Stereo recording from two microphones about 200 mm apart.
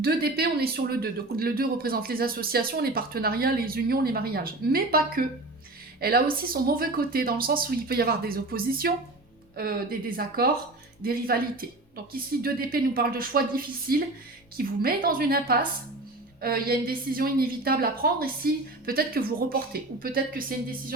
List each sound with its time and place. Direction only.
0.0 s a woman's voice: 50° right (ahead or behind)
10.2 s speech: 50° right (ahead or behind)